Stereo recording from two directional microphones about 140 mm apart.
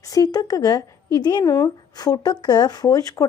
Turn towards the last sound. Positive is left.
turn(degrees=25)  # may be behind; listen again after turning